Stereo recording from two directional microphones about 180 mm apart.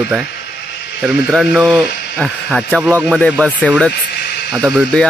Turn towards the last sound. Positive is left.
turn(degrees=5)  # may be behind; listen again after turning